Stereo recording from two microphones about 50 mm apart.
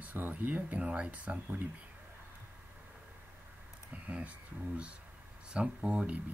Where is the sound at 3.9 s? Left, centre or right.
Right.